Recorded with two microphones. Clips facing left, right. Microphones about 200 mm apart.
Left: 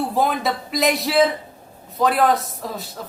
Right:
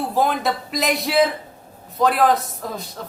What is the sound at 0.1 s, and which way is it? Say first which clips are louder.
Speech: even; centre (ahead or behind).